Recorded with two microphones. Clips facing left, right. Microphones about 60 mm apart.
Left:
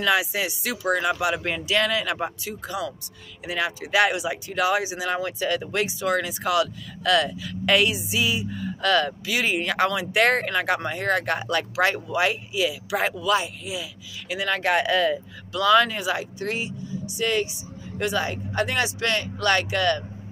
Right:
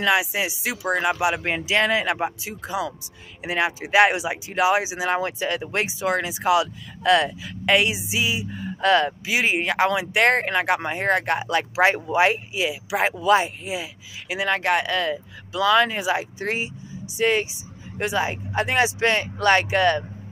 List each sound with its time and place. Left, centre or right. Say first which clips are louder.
0.0 s speech: right 1 dB; centre
11.7 s speech: right 5 dB; right
14.3 s speech: right 2 dB; centre
14.6 s speech: left 1 dB; centre; by 20.1 s right